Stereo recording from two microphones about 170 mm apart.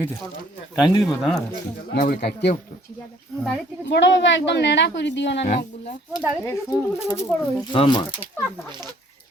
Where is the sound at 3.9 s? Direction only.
90° left.